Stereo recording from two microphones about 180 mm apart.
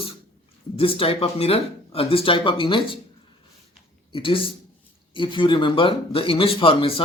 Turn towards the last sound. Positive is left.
turn(degrees=30)  # may be behind; listen again after turning